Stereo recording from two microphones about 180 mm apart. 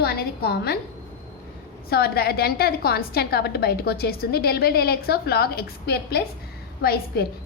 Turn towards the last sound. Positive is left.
turn(degrees=60)  # may be behind; listen again after turning